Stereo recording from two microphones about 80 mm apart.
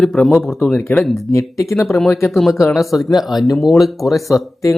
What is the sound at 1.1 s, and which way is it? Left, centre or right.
Speech, left.